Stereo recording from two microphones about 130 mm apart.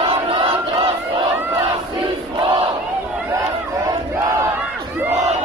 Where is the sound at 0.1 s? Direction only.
45° right (ahead or behind).